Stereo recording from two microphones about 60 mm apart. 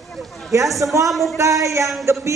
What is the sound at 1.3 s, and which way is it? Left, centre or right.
Speech, right.